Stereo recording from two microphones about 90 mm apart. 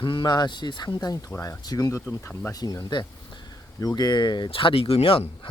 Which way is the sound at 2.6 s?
45° left (ahead or behind).